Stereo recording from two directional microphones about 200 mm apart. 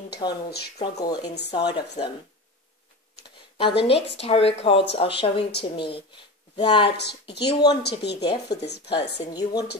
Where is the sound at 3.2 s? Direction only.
25° left (ahead or behind).